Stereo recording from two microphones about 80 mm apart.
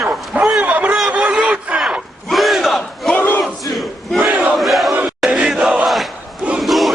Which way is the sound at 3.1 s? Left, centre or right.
Left.